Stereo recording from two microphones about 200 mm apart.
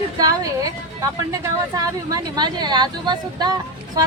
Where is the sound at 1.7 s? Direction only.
20° right (ahead or behind).